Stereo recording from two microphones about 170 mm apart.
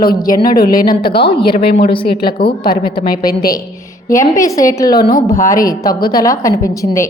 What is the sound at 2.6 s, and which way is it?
Speech, 25° left (ahead or behind).